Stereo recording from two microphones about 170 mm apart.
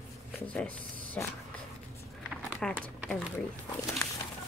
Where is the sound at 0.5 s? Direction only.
10° left (ahead or behind).